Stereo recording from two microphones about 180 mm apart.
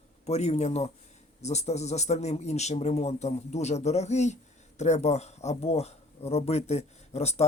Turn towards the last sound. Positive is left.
turn(degrees=35)  # may be behind; listen again after turning